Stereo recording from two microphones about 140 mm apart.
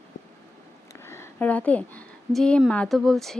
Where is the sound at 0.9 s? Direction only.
20° left (ahead or behind).